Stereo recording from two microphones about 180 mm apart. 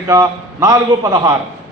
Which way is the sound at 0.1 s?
20° right (ahead or behind).